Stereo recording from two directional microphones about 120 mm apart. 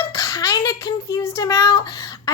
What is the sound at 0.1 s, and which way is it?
A woman's voice, 30° left (ahead or behind).